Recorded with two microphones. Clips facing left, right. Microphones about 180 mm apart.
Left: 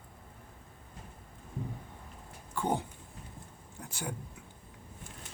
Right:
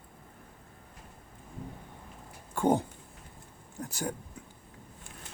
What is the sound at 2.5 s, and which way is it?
Speech, 50° right (ahead or behind).